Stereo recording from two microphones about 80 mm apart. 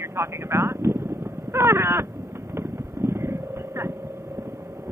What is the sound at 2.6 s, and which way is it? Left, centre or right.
Vehicle, right.